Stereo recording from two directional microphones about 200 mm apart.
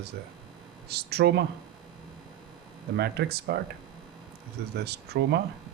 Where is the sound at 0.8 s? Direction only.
50° right (ahead or behind).